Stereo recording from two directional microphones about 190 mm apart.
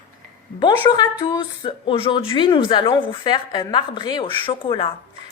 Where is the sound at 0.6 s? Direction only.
25° left (ahead or behind).